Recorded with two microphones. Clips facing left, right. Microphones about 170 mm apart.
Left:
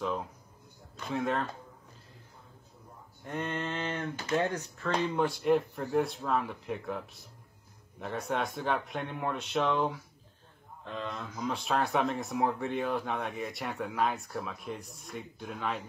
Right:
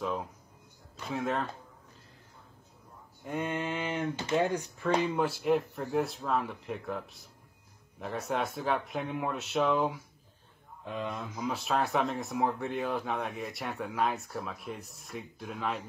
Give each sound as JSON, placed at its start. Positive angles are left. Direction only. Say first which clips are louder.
{"t": 0.0, "sound": "speech", "louder": "even", "side_deg": 0}
{"t": 3.3, "sound": "a sound", "louder": "right 2 dB", "side_deg": -10}
{"t": 4.3, "sound": "speech", "louder": "right 1 dB", "side_deg": -10}